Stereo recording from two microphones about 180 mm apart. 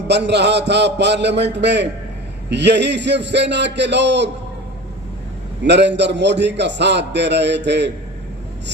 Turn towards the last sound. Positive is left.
turn(degrees=-75)  # may be behind; listen again after turning